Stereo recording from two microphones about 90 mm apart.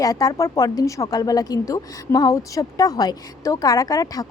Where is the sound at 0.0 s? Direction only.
40° left (ahead or behind).